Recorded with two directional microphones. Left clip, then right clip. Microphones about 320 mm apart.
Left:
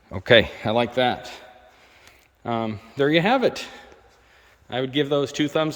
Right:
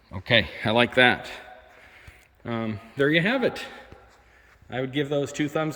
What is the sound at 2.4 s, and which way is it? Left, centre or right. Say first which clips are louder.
A man's voice: left 5 dB; centre.